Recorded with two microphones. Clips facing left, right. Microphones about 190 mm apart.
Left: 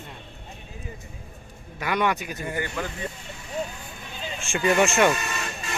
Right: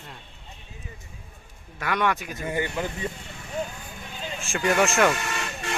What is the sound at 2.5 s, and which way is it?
Speech, 20° right (ahead or behind).